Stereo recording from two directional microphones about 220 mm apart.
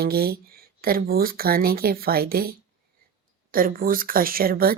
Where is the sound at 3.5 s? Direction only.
40° right (ahead or behind).